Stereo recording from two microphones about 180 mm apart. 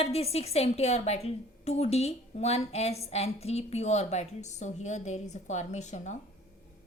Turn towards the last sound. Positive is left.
turn(degrees=40)  # may be behind; listen again after turning